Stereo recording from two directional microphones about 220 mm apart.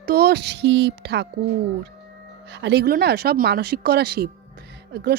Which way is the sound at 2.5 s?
50° right (ahead or behind).